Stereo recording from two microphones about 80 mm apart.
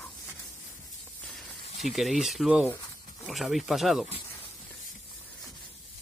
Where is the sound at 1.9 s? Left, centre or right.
Centre.